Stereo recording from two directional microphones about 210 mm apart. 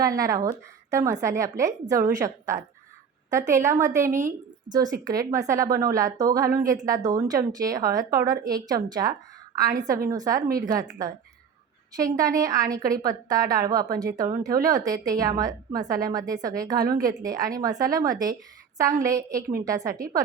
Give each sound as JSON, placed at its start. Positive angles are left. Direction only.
{"t": 0.0, "sound": "speech", "side_deg": -15}
{"t": 11.9, "sound": "a woman's voice", "side_deg": -15}